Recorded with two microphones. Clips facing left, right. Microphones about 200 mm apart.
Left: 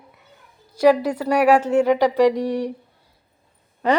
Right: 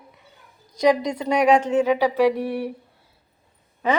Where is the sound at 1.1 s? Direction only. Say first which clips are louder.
Left 2 dB; 20° right (ahead or behind).